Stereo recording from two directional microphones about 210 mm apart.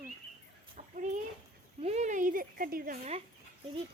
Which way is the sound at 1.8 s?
30° right (ahead or behind).